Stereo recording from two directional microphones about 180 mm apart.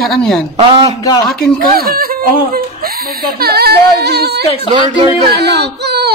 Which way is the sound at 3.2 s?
60° right (ahead or behind).